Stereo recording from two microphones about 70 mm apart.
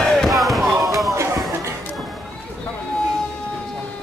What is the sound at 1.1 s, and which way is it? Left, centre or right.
Music, right.